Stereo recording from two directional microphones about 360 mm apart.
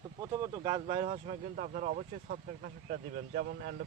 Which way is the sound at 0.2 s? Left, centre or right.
Centre.